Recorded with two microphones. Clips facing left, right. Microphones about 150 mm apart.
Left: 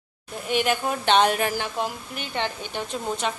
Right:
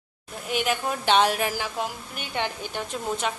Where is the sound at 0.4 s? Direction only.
Centre (ahead or behind).